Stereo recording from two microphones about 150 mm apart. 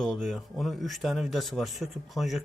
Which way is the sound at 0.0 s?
Centre (ahead or behind).